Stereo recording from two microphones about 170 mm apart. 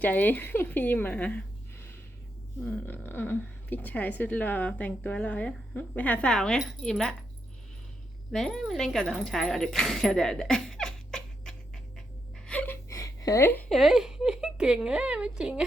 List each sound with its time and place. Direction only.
0.0 s a woman's voice: 10° left (ahead or behind)
8.3 s speech: 5° left (ahead or behind)
12.5 s whimper: 10° left (ahead or behind)
13.7 s speech: centre (ahead or behind)